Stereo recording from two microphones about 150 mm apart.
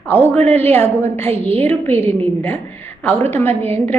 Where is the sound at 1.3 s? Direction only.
40° right (ahead or behind).